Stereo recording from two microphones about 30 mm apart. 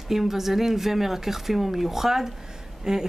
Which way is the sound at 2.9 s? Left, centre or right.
Right.